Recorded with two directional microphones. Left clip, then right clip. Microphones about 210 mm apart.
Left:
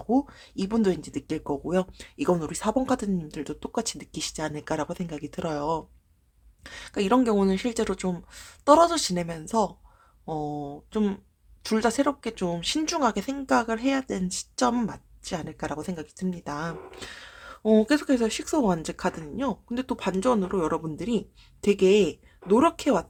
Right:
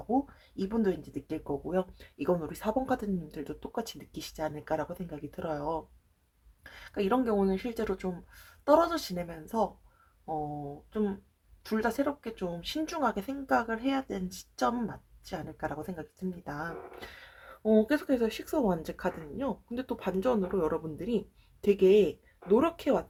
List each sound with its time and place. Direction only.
0.1 s speech: 35° left (ahead or behind)